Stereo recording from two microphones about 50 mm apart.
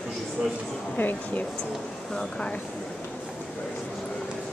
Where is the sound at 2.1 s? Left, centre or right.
Centre.